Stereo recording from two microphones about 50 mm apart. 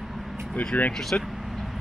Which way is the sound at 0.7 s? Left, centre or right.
Left.